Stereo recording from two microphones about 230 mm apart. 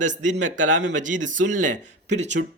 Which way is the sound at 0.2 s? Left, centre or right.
Right.